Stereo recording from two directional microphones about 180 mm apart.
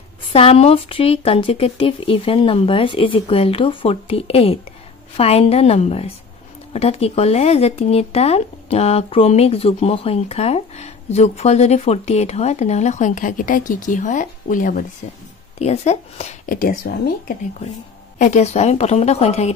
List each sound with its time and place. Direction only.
0.3 s speech: 30° left (ahead or behind); by 14.9 s 50° left (ahead or behind)
15.6 s speech: 40° left (ahead or behind)
16.5 s speech: 55° left (ahead or behind)
18.2 s speech: 40° left (ahead or behind)